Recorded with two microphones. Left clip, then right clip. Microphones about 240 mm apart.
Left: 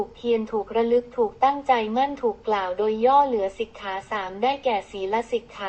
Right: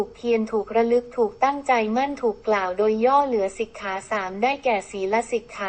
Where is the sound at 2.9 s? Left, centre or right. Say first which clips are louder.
Left 2 dB; right.